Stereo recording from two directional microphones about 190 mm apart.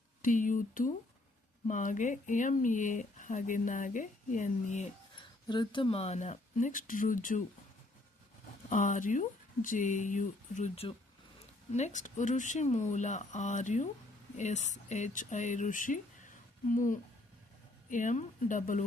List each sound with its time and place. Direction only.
0.2 s speech: 45° left (ahead or behind)
5.1 s speech: 25° left (ahead or behind); by 7.4 s 45° left (ahead or behind)
8.7 s speech: 45° left (ahead or behind)